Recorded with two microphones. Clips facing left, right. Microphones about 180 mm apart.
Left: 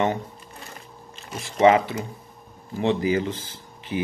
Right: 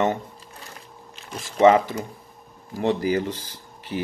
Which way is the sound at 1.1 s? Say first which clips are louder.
Right 1 dB; 5° left (ahead or behind).